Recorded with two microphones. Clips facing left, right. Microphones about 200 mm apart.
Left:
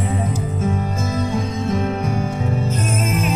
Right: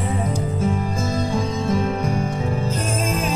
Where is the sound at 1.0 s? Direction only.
30° right (ahead or behind).